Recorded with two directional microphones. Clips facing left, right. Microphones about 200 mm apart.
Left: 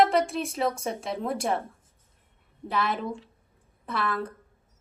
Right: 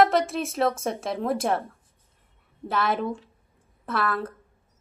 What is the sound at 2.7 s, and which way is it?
Speech, centre (ahead or behind).